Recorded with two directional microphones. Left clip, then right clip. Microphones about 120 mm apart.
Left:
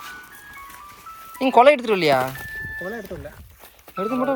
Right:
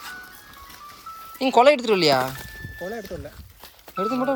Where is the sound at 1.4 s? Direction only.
15° right (ahead or behind).